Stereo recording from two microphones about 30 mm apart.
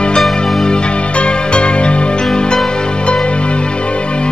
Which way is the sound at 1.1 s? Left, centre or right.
Left.